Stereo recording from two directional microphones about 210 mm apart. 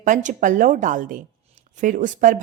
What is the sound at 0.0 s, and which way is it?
Speech, 35° right (ahead or behind).